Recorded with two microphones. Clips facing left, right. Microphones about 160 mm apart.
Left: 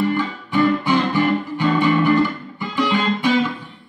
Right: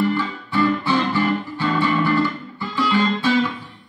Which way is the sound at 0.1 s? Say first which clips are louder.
Left 2 dB; 15° left (ahead or behind).